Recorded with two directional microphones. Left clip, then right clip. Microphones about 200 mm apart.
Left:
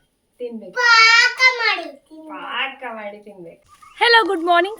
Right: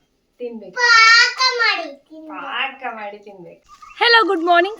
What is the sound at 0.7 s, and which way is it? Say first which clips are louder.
Child singing: right 1 dB; 30° left (ahead or behind).